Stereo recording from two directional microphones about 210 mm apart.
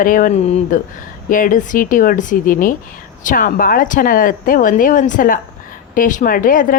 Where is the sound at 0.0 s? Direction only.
40° left (ahead or behind).